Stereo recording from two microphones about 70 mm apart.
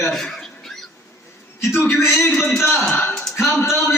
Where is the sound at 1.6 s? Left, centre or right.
Left.